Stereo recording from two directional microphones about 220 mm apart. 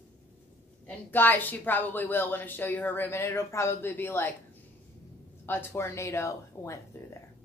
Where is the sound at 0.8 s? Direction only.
10° left (ahead or behind).